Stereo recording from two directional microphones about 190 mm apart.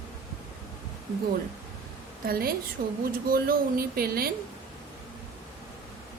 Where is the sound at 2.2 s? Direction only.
50° right (ahead or behind).